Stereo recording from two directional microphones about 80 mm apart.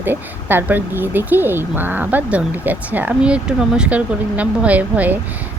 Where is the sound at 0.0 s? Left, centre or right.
Right.